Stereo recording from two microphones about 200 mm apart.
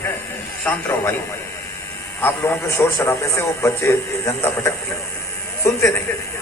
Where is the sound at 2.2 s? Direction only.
10° left (ahead or behind).